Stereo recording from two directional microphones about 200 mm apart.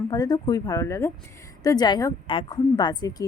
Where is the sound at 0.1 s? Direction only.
20° left (ahead or behind).